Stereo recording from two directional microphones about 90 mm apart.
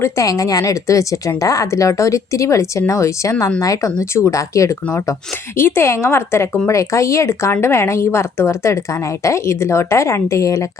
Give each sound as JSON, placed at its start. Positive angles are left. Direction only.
{"t": 0.0, "sound": "speech", "side_deg": 40}
{"t": 5.3, "sound": "speech", "side_deg": 25}